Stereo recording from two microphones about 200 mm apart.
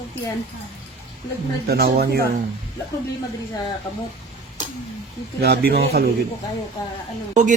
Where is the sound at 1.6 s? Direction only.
50° right (ahead or behind).